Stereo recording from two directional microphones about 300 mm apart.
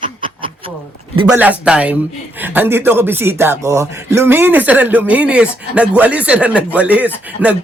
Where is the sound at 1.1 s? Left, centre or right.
Centre.